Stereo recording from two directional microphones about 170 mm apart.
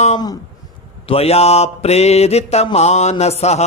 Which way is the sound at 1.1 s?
35° left (ahead or behind).